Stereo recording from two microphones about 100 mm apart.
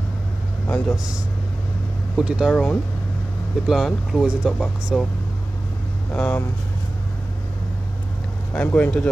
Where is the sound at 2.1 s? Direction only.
5° right (ahead or behind).